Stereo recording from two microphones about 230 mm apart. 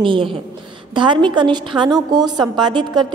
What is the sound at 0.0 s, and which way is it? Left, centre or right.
A woman's voice, right.